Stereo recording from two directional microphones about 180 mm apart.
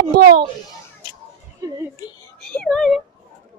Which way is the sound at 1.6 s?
20° right (ahead or behind).